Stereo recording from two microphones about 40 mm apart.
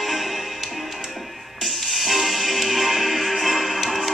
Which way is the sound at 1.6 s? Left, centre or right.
Centre.